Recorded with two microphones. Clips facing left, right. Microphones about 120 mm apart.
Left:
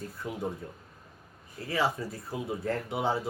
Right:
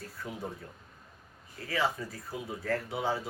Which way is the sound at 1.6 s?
25° left (ahead or behind).